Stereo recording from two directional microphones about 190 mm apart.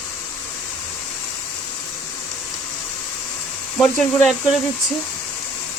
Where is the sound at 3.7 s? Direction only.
Centre (ahead or behind).